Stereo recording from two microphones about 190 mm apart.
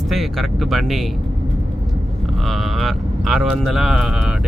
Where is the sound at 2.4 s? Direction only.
Centre (ahead or behind).